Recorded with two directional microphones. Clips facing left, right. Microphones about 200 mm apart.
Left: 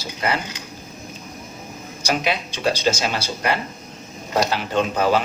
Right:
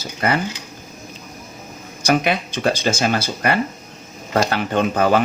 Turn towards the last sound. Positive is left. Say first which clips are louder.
# right 2 dB
turn(degrees=-55)  # may be behind; listen again after turning